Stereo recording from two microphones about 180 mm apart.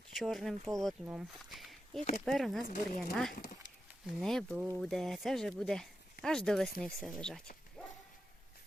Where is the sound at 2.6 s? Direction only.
45° left (ahead or behind).